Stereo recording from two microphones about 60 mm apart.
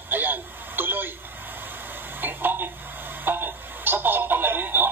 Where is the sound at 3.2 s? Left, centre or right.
Right.